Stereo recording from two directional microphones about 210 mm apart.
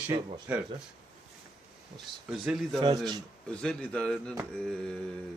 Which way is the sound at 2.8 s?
20° right (ahead or behind).